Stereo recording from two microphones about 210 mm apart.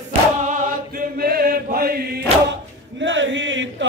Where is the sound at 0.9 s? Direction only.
45° right (ahead or behind).